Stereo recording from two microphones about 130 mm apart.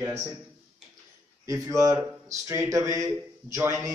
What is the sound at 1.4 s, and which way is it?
Speech, 25° right (ahead or behind).